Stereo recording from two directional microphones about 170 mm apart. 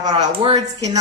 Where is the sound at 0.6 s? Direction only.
20° right (ahead or behind).